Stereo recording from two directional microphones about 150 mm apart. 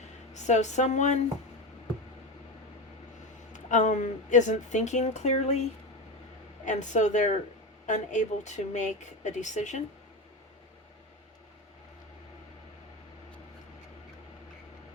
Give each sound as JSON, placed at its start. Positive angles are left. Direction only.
{"t": 0.3, "sound": "speech", "side_deg": 50}
{"t": 3.5, "sound": "speech", "side_deg": 55}
{"t": 6.7, "sound": "speech", "side_deg": 55}